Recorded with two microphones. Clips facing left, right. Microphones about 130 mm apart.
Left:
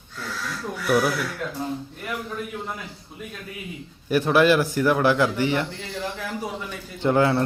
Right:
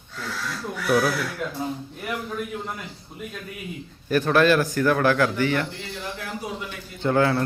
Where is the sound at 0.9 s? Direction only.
5° left (ahead or behind).